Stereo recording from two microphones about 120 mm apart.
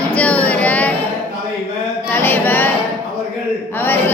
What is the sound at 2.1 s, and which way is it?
Singing, 20° left (ahead or behind).